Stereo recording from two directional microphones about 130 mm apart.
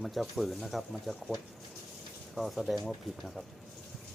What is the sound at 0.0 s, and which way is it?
Speech, centre (ahead or behind).